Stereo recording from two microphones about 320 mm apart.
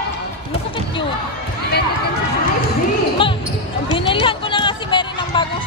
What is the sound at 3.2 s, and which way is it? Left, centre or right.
Basketball bounce, centre.